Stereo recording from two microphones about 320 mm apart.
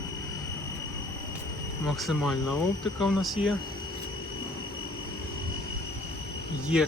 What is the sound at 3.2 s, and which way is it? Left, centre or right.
Speech, centre.